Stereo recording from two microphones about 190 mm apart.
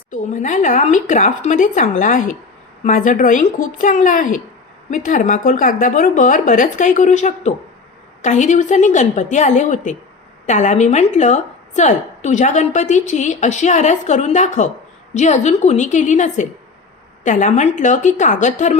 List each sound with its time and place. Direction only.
0.1 s a woman's voice: 45° left (ahead or behind)